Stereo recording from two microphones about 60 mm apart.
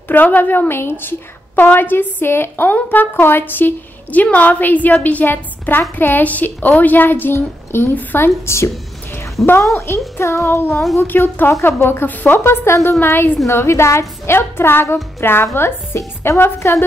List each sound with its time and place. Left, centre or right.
0.1 s a woman's voice: left
8.5 s a sound: left
9.8 s a woman's voice: left
11.1 s a woman's voice: left
12.4 s a woman's voice: left